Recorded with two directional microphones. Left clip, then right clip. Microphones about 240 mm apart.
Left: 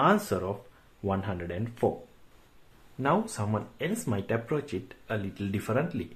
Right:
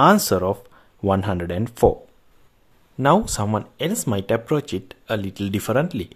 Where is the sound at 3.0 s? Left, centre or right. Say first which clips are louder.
Right 10 dB; right.